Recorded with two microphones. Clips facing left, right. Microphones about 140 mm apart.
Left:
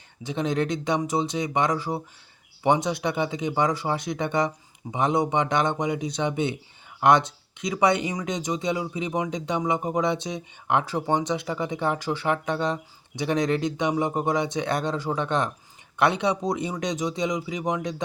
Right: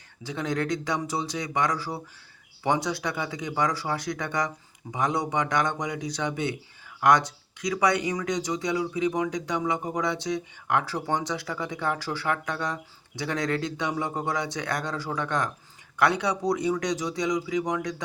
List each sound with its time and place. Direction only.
0.2 s speech: 20° left (ahead or behind)